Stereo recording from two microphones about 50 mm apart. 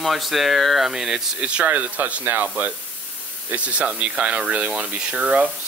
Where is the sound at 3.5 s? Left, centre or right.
Right.